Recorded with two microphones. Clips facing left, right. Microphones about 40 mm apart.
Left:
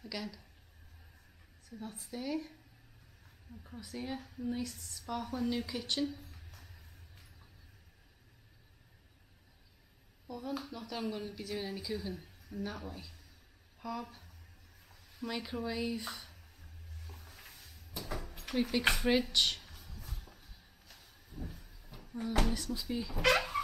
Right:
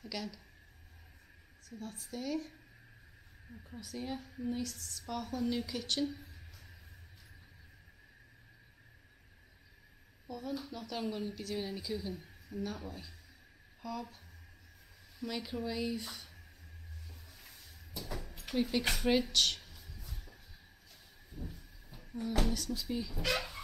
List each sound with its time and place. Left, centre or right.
0.0 s speech: centre
1.7 s a woman's voice: centre
3.6 s a woman's voice: centre
10.2 s a woman's voice: centre
13.7 s a sound: centre
15.1 s a woman's voice: centre
17.3 s cupboard open or close: centre
18.5 s a woman's voice: centre
20.0 s a sound: centre
21.3 s vehicle: centre
21.5 s train: left
22.1 s a woman's voice: centre